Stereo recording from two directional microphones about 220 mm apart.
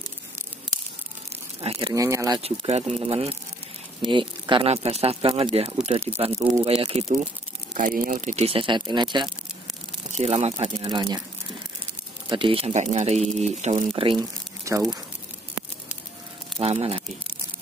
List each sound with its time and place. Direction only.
1.6 s speech: 25° right (ahead or behind)
2.4 s speech: 30° right (ahead or behind)
7.7 s speech: 40° right (ahead or behind); by 11.2 s 20° right (ahead or behind)
12.3 s speech: 25° right (ahead or behind)
16.5 s speech: 25° right (ahead or behind)